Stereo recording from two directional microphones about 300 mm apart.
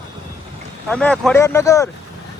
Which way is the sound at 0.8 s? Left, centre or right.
Centre.